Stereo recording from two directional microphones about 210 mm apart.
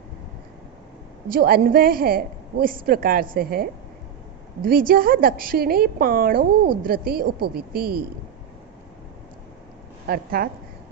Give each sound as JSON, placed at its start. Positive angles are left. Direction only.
{"t": 1.3, "sound": "a woman's voice", "side_deg": -45}
{"t": 10.1, "sound": "a woman's voice", "side_deg": -45}